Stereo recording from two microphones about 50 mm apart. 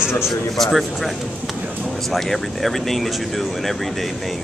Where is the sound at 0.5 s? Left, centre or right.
Centre.